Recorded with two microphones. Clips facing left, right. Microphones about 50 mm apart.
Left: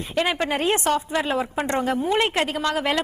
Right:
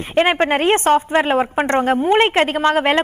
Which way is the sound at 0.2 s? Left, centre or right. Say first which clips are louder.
Right 7 dB; right.